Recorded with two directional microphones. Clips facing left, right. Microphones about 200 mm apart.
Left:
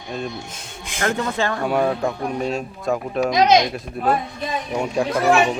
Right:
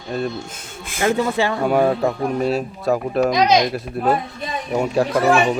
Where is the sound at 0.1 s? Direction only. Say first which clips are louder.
Right 5 dB; 5° right (ahead or behind).